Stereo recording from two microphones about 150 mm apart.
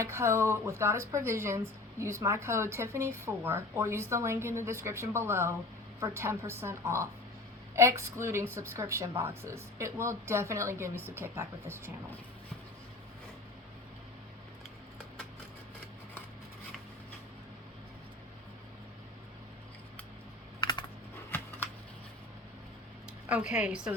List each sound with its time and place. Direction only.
0.0 s speech: 15° right (ahead or behind)
20.6 s computer keyboard: 30° left (ahead or behind)
21.2 s shuffling cards: 15° left (ahead or behind)
23.3 s speech: 5° right (ahead or behind)